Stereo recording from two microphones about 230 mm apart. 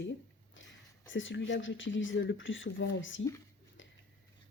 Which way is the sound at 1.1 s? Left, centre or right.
Left.